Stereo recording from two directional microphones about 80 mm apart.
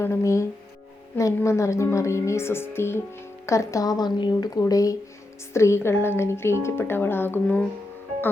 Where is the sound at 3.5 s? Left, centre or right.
Left.